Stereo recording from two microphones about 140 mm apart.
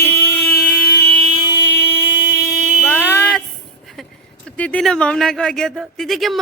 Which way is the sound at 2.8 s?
15° left (ahead or behind).